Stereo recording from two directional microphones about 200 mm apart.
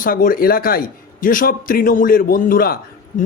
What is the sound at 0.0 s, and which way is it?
Speech, 45° left (ahead or behind).